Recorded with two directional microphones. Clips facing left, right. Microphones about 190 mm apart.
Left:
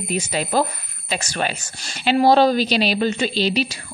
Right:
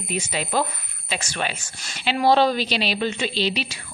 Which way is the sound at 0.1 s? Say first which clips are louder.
Left 3 dB; 40° left (ahead or behind).